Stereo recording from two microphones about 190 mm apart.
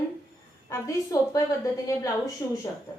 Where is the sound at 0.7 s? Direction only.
15° left (ahead or behind).